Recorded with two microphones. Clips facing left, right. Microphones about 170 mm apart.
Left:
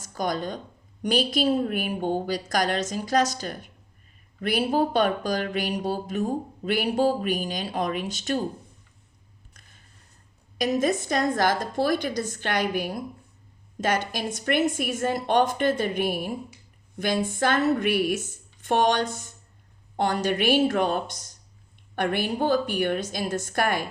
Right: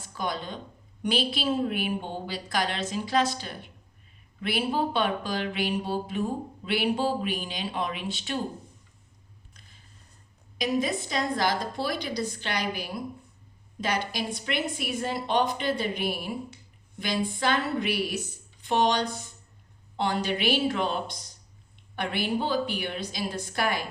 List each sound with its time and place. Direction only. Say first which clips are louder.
0.0 s speech: left 5 dB; 45° left (ahead or behind)
9.5 s a sound: left 1 dB; 50° left (ahead or behind)
10.6 s speech: left 4 dB; 45° left (ahead or behind)